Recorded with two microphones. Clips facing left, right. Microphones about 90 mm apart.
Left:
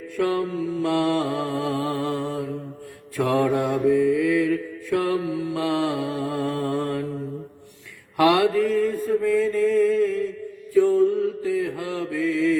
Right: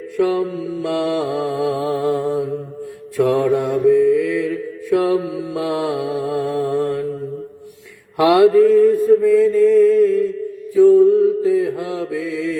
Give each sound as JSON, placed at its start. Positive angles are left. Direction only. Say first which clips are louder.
{"t": 0.2, "sound": "mantra", "louder": "right 5 dB", "side_deg": 0}
{"t": 1.8, "sound": "mantra", "louder": "right 6 dB", "side_deg": -15}
{"t": 3.2, "sound": "mantra", "louder": "right 5 dB", "side_deg": 0}
{"t": 8.2, "sound": "speech", "louder": "right 7 dB", "side_deg": -20}
{"t": 9.0, "sound": "mantra", "louder": "right 8 dB", "side_deg": -5}
{"t": 11.0, "sound": "mantra", "louder": "right 8 dB", "side_deg": -20}
{"t": 12.1, "sound": "mantra", "louder": "left 5 dB", "side_deg": -5}